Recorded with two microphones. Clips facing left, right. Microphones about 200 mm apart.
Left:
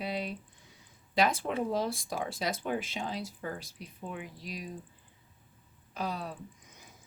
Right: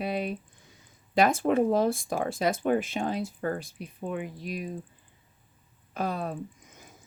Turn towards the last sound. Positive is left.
turn(degrees=-50)  # may be behind; listen again after turning